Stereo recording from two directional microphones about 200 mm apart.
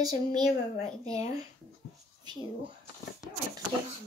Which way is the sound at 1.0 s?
30° left (ahead or behind).